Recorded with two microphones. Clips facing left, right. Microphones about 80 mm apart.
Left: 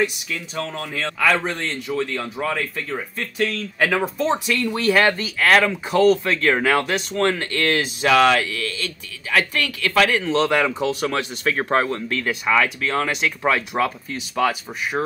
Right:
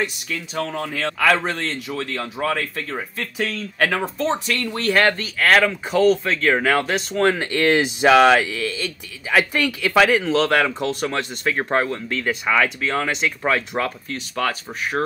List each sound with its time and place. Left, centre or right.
0.0 s speech: centre
7.2 s speech: centre
11.4 s speech: centre